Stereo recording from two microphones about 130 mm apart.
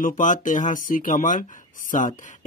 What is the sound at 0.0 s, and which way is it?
Speech, 80° left.